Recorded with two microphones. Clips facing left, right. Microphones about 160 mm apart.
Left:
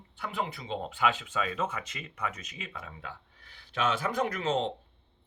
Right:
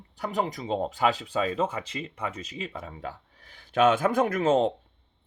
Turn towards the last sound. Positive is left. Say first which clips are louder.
# right 7 dB
turn(degrees=-45)  # may be behind; listen again after turning